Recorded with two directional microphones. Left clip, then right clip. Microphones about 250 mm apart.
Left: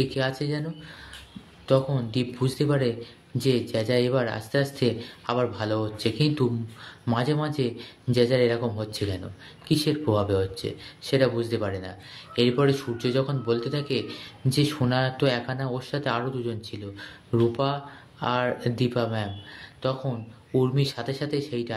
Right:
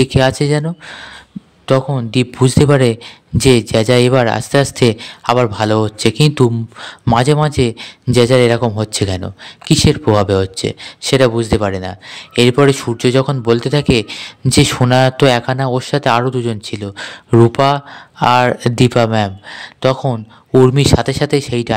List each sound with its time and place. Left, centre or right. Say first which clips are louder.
0.0 s speech: right 14 dB; right